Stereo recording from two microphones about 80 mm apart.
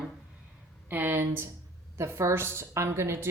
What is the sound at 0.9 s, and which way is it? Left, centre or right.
Speech, right.